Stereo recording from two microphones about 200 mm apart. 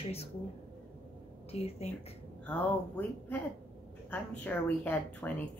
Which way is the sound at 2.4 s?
5° left (ahead or behind).